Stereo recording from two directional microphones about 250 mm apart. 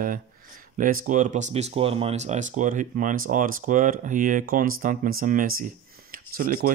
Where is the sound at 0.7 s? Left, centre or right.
Right.